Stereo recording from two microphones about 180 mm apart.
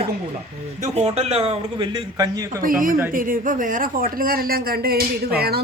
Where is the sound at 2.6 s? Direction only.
50° right (ahead or behind).